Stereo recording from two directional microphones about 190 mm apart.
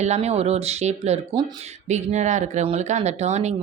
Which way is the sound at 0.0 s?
35° right (ahead or behind).